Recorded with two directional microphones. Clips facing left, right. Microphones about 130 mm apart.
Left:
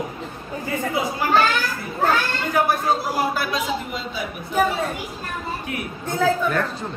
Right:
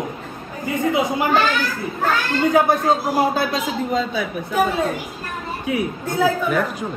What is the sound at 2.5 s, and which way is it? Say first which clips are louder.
Speech: right 2 dB; 20° right (ahead or behind).